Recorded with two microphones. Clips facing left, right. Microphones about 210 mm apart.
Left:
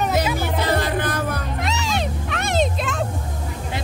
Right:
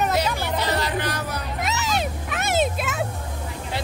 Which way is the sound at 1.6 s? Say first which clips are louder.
Right 1 dB; 5° right (ahead or behind).